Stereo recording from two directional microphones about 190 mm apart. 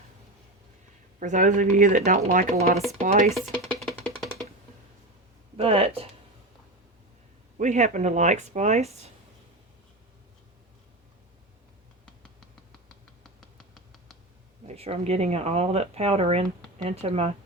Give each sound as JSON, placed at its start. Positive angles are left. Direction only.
{"t": 1.2, "sound": "speech", "side_deg": -40}
{"t": 3.2, "sound": "music", "side_deg": 0}
{"t": 5.5, "sound": "speech", "side_deg": -30}
{"t": 7.6, "sound": "speech", "side_deg": -40}
{"t": 14.7, "sound": "speech", "side_deg": -30}